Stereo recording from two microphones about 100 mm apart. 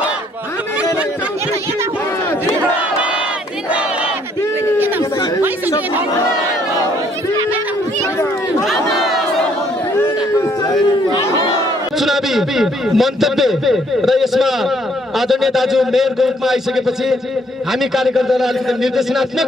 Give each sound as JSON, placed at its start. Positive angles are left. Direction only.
{"t": 4.7, "sound": "a sound", "side_deg": -20}
{"t": 8.6, "sound": "crowd", "side_deg": -5}
{"t": 12.0, "sound": "a man's voice", "side_deg": 0}